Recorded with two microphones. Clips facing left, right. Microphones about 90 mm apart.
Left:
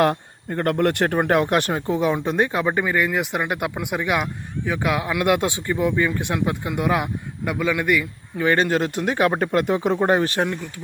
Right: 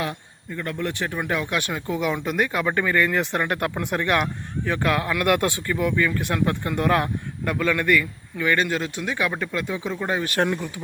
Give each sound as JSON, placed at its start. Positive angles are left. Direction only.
{"t": 0.0, "sound": "speech", "side_deg": 65}
{"t": 8.4, "sound": "speech", "side_deg": 35}
{"t": 10.0, "sound": "speech", "side_deg": 40}